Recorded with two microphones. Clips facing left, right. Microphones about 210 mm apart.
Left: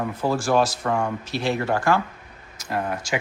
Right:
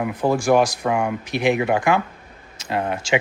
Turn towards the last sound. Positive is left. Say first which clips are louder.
# right 5 dB
turn(degrees=-25)  # may be behind; listen again after turning